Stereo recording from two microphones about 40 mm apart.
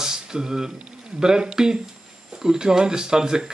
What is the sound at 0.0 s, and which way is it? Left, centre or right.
Speech, centre.